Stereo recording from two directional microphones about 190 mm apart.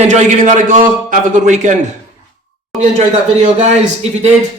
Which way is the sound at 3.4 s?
35° right (ahead or behind).